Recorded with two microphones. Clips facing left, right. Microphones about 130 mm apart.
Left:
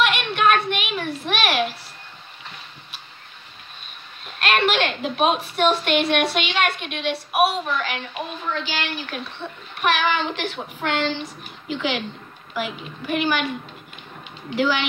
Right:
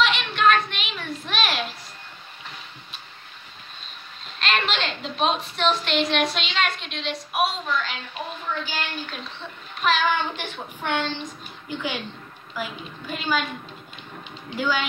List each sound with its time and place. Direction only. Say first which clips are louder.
0.0 s a sound: left 1 dB; 55° left (ahead or behind)
4.4 s a sound: left 5 dB; 60° left (ahead or behind)
5.6 s a woman's voice: left 4 dB; 55° left (ahead or behind)
8.6 s a woman's voice: left 3 dB; 90° left
12.5 s a woman's voice: left 4 dB; 75° left (ahead or behind)
14.5 s a woman's voice: left 4 dB; 80° left